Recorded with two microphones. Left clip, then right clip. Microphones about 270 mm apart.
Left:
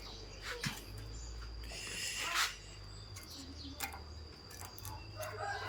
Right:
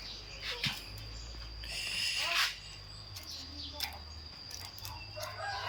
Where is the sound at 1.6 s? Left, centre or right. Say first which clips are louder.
Right 7 dB; centre.